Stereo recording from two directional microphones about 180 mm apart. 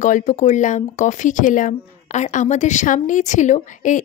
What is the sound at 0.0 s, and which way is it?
Speech, 45° left (ahead or behind).